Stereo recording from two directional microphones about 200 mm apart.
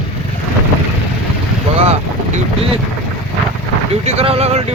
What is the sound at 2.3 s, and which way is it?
Vehicle, 30° right (ahead or behind).